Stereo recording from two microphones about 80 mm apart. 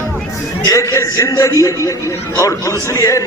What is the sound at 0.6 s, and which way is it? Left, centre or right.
A man's voice, left.